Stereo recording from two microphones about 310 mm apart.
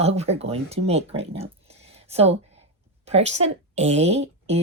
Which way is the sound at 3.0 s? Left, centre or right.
Centre.